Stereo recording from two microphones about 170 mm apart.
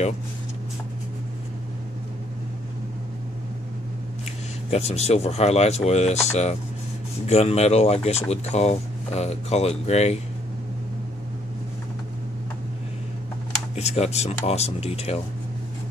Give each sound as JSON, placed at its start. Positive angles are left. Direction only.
{"t": 4.6, "sound": "speech", "side_deg": 40}
{"t": 13.7, "sound": "speech", "side_deg": 40}